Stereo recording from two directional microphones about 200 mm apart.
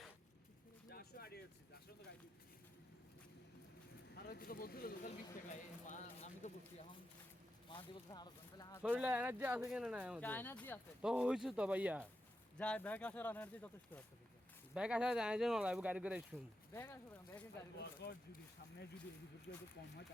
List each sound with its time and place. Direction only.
0.9 s a sound: 50° left (ahead or behind)
4.2 s speech: 50° left (ahead or behind)
7.7 s speech: 20° left (ahead or behind)
9.0 s speech: 5° right (ahead or behind)
10.2 s speech: 10° left (ahead or behind)
11.0 s speech: 5° right (ahead or behind)
12.5 s speech: 5° left (ahead or behind)
14.7 s speech: 5° right (ahead or behind)
16.7 s speech: 10° left (ahead or behind)
17.7 s speech: 55° left (ahead or behind)